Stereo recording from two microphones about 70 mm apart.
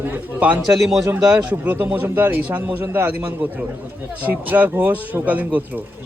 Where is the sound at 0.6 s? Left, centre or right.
Centre.